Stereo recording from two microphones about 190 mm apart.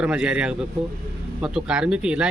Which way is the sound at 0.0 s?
5° right (ahead or behind).